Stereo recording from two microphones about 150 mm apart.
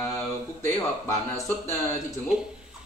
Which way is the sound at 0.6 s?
20° left (ahead or behind).